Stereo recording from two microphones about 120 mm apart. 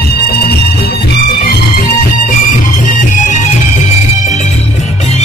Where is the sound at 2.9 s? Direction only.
90° left.